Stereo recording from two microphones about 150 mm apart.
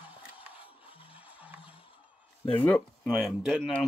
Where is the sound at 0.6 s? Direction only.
35° left (ahead or behind).